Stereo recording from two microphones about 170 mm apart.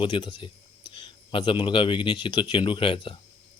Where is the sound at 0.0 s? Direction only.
25° left (ahead or behind).